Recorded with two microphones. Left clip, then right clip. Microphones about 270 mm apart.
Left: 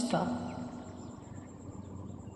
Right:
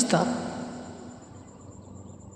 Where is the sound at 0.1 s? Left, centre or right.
Right.